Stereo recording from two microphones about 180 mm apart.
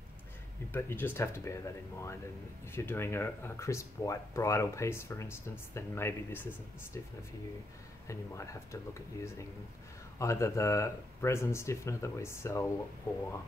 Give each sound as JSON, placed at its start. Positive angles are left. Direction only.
{"t": 0.7, "sound": "speech", "side_deg": 10}
{"t": 10.1, "sound": "speech", "side_deg": 15}